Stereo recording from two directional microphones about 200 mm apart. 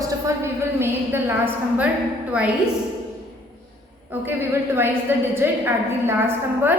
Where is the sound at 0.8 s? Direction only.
10° right (ahead or behind).